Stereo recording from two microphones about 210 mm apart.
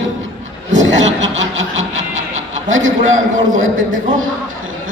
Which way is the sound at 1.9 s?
35° right (ahead or behind).